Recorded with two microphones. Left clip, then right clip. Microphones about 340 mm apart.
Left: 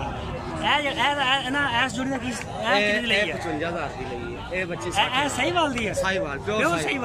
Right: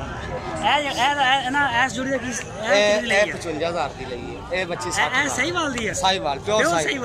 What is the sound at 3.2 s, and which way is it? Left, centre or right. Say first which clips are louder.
Speech: right 4 dB; centre.